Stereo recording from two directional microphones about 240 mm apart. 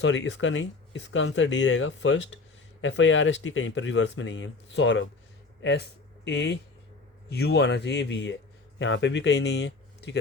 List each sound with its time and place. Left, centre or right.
0.0 s speech: left